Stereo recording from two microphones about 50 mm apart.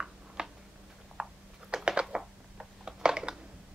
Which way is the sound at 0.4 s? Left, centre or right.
Centre.